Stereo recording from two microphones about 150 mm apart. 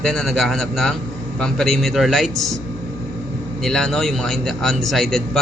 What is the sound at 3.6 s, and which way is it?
Speech, 5° left (ahead or behind).